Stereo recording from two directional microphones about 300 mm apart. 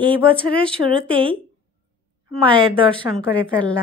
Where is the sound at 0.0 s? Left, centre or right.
Centre.